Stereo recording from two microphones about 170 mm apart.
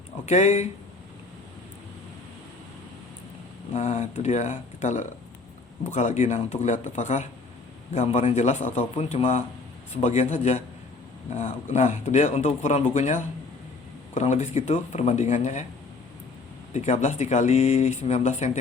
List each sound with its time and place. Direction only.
0.3 s speech: 40° left (ahead or behind)
3.7 s speech: 40° left (ahead or behind)
16.7 s speech: 45° left (ahead or behind)